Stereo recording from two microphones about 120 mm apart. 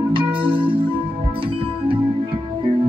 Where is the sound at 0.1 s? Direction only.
45° right (ahead or behind).